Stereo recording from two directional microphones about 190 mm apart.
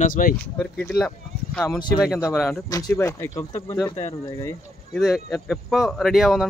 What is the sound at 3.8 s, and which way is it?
Speech, 35° left (ahead or behind).